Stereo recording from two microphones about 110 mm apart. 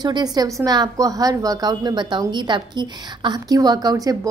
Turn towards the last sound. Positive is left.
turn(degrees=-35)  # may be behind; listen again after turning